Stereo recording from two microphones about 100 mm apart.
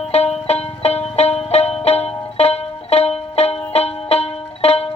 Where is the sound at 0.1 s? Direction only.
90° left.